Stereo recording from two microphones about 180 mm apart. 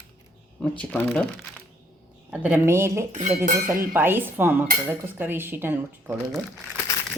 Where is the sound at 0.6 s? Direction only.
5° left (ahead or behind).